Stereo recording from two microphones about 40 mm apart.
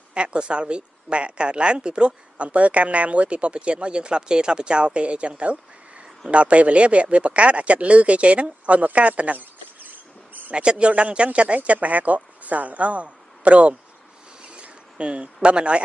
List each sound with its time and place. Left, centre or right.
0.1 s speech: right
5.4 s a sound: right
6.3 s speech: right
9.8 s rodents: right
10.5 s speech: right
14.5 s insect: right
15.4 s speech: right